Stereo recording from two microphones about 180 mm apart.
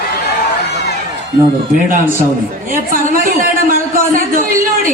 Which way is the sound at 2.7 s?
50° right (ahead or behind).